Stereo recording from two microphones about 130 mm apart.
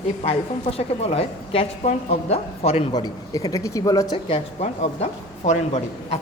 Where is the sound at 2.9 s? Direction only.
30° left (ahead or behind).